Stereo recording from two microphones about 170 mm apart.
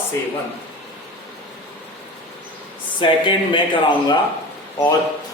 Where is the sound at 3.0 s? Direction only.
30° left (ahead or behind).